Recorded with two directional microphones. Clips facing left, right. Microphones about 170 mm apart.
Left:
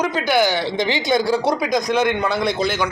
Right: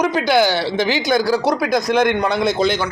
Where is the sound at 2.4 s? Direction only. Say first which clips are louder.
Right 3 dB; 20° right (ahead or behind).